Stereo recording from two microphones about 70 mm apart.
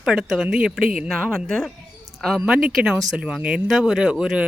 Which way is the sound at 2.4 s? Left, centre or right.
Centre.